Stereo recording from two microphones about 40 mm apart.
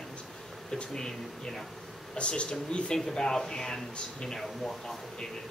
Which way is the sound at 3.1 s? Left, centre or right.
Centre.